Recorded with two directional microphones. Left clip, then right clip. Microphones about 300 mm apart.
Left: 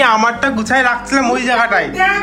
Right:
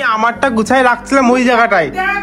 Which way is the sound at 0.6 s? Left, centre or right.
Centre.